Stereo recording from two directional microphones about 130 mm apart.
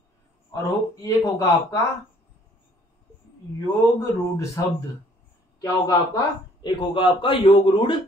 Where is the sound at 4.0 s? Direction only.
25° left (ahead or behind); by 8.0 s 40° left (ahead or behind).